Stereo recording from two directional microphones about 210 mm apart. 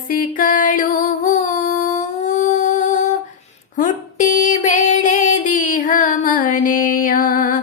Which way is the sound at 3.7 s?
40° left (ahead or behind).